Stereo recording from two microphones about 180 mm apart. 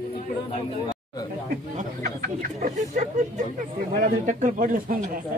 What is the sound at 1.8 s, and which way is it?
Speech, 45° right (ahead or behind).